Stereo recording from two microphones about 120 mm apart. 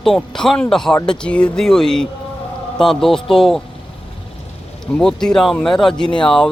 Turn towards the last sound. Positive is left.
turn(degrees=5)  # may be behind; listen again after turning